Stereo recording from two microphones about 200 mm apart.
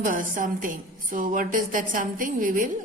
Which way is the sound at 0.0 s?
40° right (ahead or behind).